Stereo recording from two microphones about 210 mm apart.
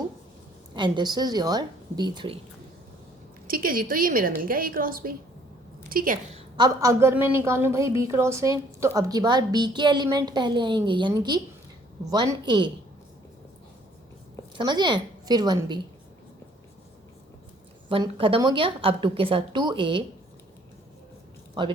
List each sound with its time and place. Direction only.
0.7 s a woman's voice: 20° right (ahead or behind)
3.4 s a woman's voice: 45° right (ahead or behind)
6.3 s a woman's voice: 20° right (ahead or behind)
14.5 s a woman's voice: 20° right (ahead or behind)
17.8 s a woman's voice: 25° right (ahead or behind)